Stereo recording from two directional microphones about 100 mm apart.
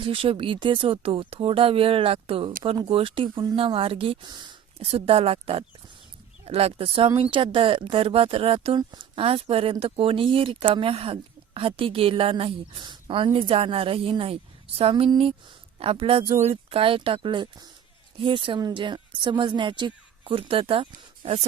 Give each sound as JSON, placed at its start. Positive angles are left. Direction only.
{"t": 0.0, "sound": "speech", "side_deg": -65}
{"t": 4.8, "sound": "speech", "side_deg": -75}
{"t": 6.4, "sound": "speech", "side_deg": -85}
{"t": 14.8, "sound": "speech", "side_deg": -80}